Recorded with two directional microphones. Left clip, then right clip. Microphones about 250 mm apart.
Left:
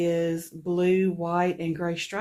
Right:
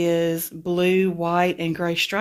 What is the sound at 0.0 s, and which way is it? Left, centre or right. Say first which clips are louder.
Speech: right 4 dB; right.